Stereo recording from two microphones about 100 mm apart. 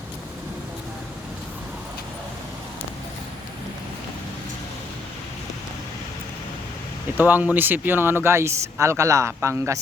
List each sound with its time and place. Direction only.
7.2 s speech: 20° right (ahead or behind)